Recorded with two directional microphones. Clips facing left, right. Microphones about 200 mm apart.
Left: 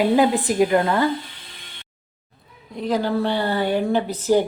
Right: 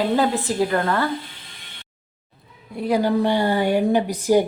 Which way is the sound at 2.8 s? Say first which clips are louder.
Right 2 dB; 10° right (ahead or behind).